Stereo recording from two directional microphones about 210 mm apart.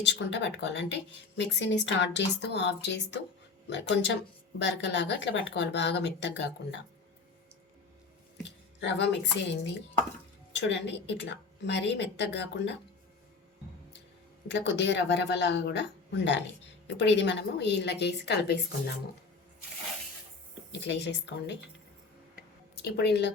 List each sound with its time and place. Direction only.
0.0 s speech: 55° left (ahead or behind)
8.4 s speech: 55° left (ahead or behind)
14.4 s speech: 55° left (ahead or behind)
20.7 s speech: 55° left (ahead or behind)
22.7 s speech: 50° left (ahead or behind)